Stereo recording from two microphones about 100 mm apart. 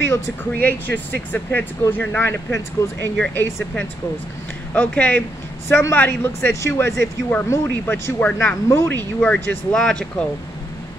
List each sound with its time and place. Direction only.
0.1 s speech: 20° left (ahead or behind)
4.7 s speech: 15° left (ahead or behind)
5.7 s speech: 25° left (ahead or behind)
8.6 s speech: 25° left (ahead or behind)
9.2 s speech: 10° left (ahead or behind)